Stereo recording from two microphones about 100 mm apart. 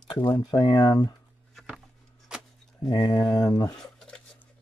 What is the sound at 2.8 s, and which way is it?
Speech, 55° left (ahead or behind).